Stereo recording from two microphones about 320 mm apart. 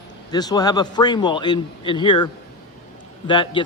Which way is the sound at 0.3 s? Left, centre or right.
Centre.